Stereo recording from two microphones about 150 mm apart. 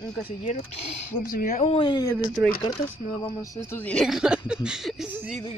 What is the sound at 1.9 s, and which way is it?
Speech, 20° left (ahead or behind).